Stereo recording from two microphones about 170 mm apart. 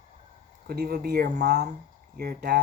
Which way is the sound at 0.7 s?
65° right (ahead or behind).